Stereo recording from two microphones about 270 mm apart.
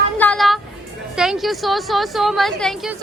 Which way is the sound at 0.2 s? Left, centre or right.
Centre.